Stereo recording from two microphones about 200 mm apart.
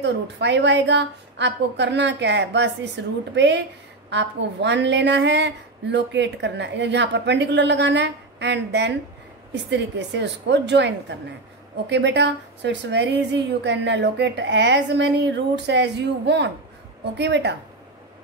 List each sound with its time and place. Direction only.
0.0 s a woman's voice: 60° right (ahead or behind)